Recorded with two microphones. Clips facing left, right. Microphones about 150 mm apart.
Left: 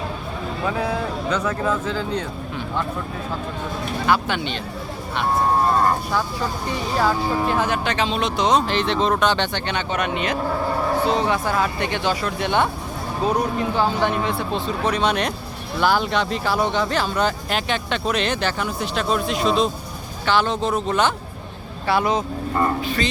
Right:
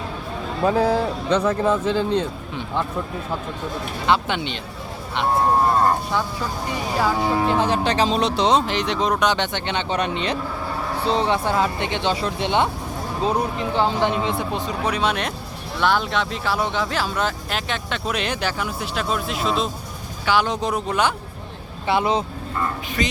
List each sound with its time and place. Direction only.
0.6 s speech: 35° right (ahead or behind)
4.0 s speech: 20° right (ahead or behind)
7.4 s speech: 25° right (ahead or behind)
9.9 s speech: 30° right (ahead or behind); by 21.1 s 10° right (ahead or behind)
21.8 s speech: 25° right (ahead or behind)